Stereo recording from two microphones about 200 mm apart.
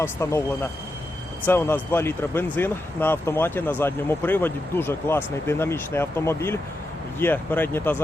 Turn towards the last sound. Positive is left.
turn(degrees=10)  # may be behind; listen again after turning